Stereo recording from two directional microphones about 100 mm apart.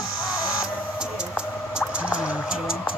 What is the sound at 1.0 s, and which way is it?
Music, 10° right (ahead or behind).